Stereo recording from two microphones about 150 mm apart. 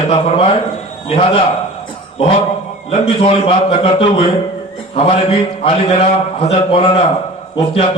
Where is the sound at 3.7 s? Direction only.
40° left (ahead or behind).